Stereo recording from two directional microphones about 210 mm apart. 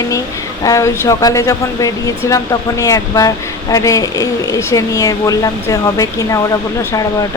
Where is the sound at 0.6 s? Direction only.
15° left (ahead or behind).